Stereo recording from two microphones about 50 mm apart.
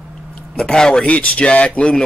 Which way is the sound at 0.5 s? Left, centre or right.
Centre.